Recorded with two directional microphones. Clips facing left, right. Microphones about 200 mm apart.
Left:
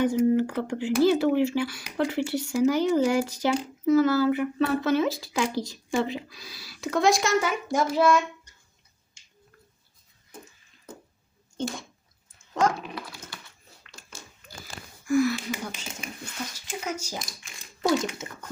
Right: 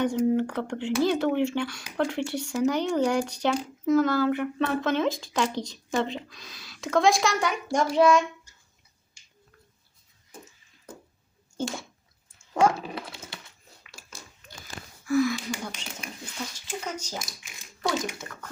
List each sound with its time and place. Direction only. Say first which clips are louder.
0.0 s speech: left 2 dB; 5° left (ahead or behind)
12.8 s dog: right 2 dB; 25° right (ahead or behind)
14.4 s a sound: right 1 dB; 5° left (ahead or behind)
16.6 s speech: left 3 dB; 10° left (ahead or behind)
17.2 s speech: even; centre (ahead or behind)
18.0 s a child's voice: left 2 dB; 20° left (ahead or behind)